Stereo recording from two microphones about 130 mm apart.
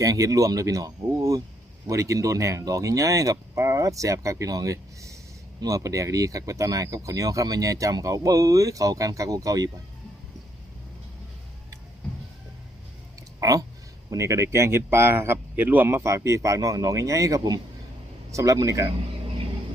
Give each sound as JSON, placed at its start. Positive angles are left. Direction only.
{"t": 0.0, "sound": "speech", "side_deg": -25}
{"t": 13.1, "sound": "a sound", "side_deg": -25}
{"t": 14.1, "sound": "speech", "side_deg": -25}